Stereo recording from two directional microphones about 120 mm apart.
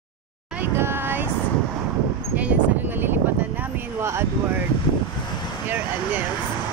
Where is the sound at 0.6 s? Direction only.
20° right (ahead or behind).